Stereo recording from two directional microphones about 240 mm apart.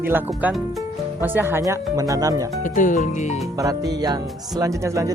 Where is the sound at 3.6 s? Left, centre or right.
Centre.